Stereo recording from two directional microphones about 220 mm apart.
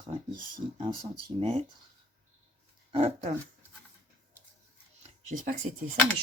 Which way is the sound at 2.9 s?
30° right (ahead or behind).